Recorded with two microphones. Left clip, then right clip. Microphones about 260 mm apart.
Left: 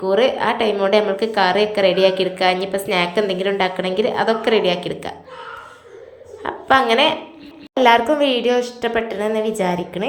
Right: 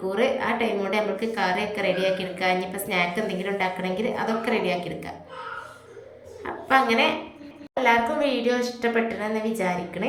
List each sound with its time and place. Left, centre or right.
0.1 s a woman's voice: centre
6.4 s a woman's voice: centre